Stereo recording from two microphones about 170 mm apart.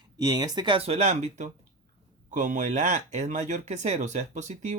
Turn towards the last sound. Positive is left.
turn(degrees=-40)  # may be behind; listen again after turning